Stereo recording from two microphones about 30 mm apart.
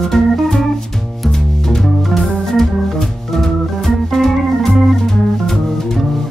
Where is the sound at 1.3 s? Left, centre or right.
Centre.